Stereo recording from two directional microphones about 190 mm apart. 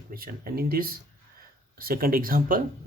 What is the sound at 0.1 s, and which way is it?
Speech, 50° right (ahead or behind).